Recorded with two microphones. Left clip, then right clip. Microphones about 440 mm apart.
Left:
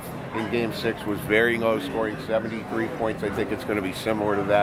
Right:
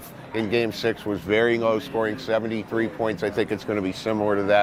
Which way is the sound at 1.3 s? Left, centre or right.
Right.